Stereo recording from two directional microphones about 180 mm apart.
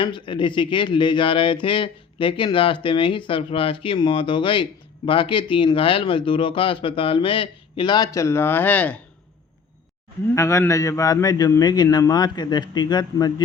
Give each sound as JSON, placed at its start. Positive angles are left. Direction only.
{"t": 0.0, "sound": "speech", "side_deg": 25}
{"t": 10.3, "sound": "speech", "side_deg": 15}